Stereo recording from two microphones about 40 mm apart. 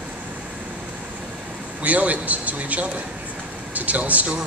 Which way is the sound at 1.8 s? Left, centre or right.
Right.